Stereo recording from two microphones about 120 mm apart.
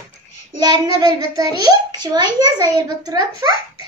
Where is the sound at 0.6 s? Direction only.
35° right (ahead or behind).